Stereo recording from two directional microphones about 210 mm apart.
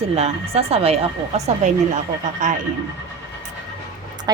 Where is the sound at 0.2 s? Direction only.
30° right (ahead or behind).